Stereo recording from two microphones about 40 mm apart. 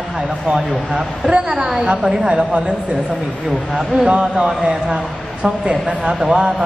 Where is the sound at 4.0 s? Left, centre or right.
Right.